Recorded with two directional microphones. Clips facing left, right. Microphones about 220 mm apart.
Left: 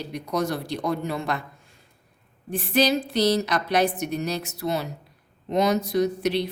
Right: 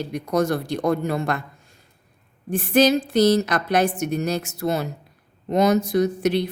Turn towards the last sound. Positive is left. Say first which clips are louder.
# right 3 dB
turn(degrees=-50)  # may be behind; listen again after turning